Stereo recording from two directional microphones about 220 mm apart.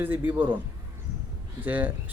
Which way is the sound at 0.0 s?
10° right (ahead or behind).